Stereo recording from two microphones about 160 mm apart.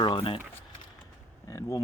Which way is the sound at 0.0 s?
35° left (ahead or behind).